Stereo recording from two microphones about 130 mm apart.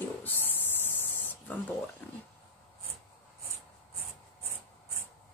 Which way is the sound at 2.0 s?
10° left (ahead or behind).